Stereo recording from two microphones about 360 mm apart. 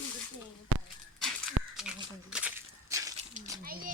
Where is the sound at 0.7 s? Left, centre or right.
Right.